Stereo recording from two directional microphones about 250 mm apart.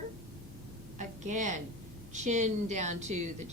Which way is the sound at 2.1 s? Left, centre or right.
Right.